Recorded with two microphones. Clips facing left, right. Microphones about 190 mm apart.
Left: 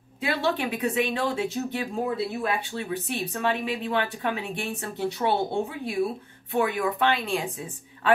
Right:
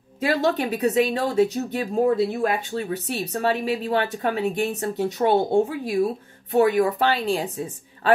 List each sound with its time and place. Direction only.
0.2 s speech: 40° right (ahead or behind)